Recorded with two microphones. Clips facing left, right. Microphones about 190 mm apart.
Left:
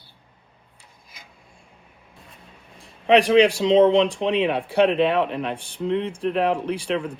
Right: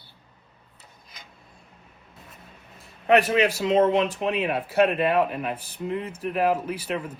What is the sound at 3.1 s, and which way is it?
Speech, 5° right (ahead or behind).